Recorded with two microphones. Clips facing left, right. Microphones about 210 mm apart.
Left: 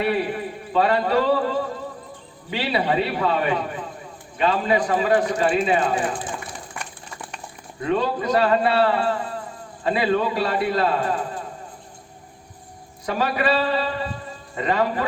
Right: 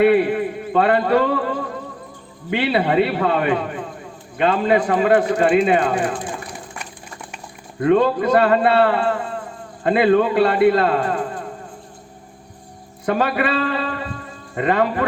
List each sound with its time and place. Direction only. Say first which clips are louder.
0.0 s a man's voice: right 8 dB; 55° right (ahead or behind)
7.8 s a man's voice: right 7 dB; 55° right (ahead or behind)
13.1 s a man's voice: right 3 dB; 55° right (ahead or behind)